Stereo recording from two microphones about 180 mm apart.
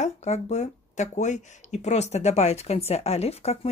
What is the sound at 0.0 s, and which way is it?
Speech, 40° left (ahead or behind).